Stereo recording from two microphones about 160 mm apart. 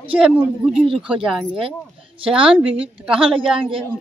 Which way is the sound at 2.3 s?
5° right (ahead or behind).